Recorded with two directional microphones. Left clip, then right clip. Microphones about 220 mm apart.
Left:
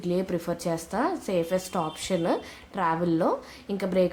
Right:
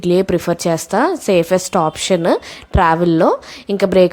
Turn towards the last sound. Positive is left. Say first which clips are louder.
# right 13 dB
turn(degrees=-40)  # may be behind; listen again after turning